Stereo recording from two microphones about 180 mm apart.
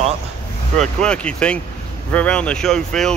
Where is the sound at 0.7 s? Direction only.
5° left (ahead or behind).